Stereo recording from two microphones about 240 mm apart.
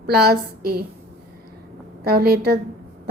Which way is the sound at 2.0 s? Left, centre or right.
Right.